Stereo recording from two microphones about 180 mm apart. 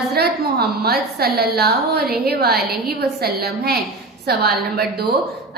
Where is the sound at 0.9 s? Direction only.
60° right (ahead or behind).